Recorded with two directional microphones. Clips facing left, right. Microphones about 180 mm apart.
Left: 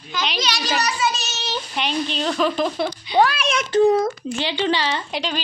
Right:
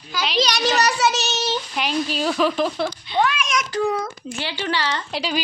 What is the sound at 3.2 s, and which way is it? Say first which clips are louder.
A child's voice: left 3 dB; 35° left (ahead or behind).